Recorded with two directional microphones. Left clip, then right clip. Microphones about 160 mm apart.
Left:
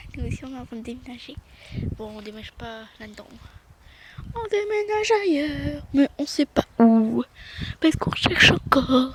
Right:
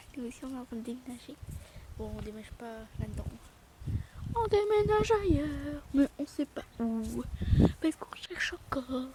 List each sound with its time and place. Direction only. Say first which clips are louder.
0.2 s speech: left 5 dB; 5° right (ahead or behind)
2.0 s speech: left 6 dB; 15° left (ahead or behind)
4.4 s speech: left 3 dB; 5° right (ahead or behind)
5.1 s speech: left 8 dB; 10° left (ahead or behind); by 7.0 s 35° left (ahead or behind)
7.2 s speech: left 1 dB; 20° left (ahead or behind)
7.8 s speech: left 13 dB; 25° left (ahead or behind)